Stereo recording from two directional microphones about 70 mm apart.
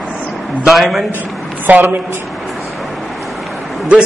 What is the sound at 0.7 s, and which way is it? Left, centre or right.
Speech, centre.